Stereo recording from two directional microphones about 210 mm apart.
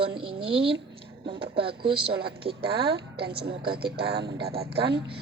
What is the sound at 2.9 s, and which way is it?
A woman's voice, 50° right (ahead or behind).